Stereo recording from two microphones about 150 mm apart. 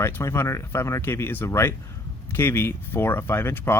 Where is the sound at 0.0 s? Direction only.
20° left (ahead or behind).